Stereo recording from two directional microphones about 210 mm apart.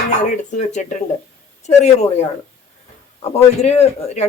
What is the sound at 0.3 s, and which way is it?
Speech, 35° left (ahead or behind).